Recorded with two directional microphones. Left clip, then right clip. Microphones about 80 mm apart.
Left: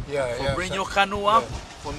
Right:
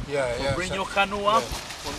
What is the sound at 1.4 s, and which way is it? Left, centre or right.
Speech, right.